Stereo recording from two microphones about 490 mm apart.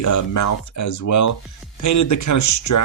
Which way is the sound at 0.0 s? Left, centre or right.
Left.